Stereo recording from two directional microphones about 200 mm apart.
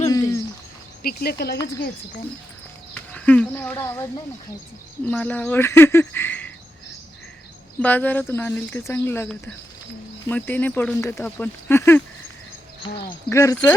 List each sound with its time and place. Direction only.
0.1 s owl: 15° left (ahead or behind)
1.0 s speech: 50° left (ahead or behind)
2.9 s a sound: 5° left (ahead or behind)
5.0 s speech: 10° left (ahead or behind)
7.8 s speech: 10° left (ahead or behind)
12.8 s speech: 25° left (ahead or behind)